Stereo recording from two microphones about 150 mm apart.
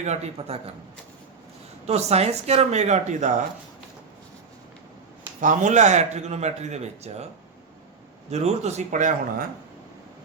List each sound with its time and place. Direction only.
0.0 s speech: 45° right (ahead or behind)
1.9 s speech: 45° right (ahead or behind)
5.4 s speech: 60° right (ahead or behind)
8.3 s speech: 45° right (ahead or behind)